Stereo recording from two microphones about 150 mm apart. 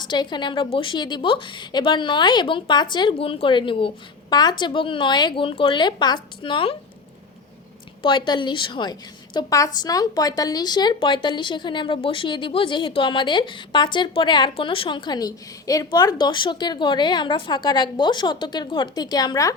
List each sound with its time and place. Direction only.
0.0 s a woman's voice: 30° left (ahead or behind)
8.0 s a woman's voice: 30° left (ahead or behind)